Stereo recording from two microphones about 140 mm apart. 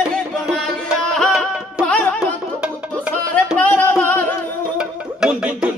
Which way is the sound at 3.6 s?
15° left (ahead or behind).